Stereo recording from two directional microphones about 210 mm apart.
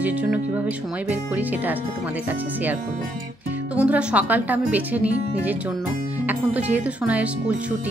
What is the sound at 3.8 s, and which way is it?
Speech, 5° right (ahead or behind).